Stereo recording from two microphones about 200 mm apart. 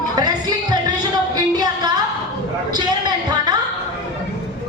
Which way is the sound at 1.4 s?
20° right (ahead or behind).